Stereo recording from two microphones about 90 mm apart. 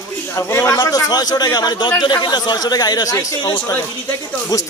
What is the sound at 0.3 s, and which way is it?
Speech, 30° left (ahead or behind).